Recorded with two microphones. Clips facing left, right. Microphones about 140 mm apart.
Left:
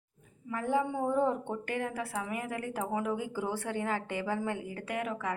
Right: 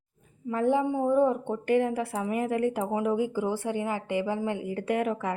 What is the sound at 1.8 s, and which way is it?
A woman's voice, 30° right (ahead or behind).